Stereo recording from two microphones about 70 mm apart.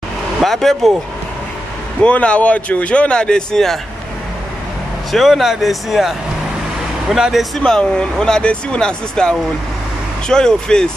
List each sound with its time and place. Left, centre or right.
0.4 s speech: centre
2.0 s speech: centre
5.1 s speech: centre
7.5 s speech: centre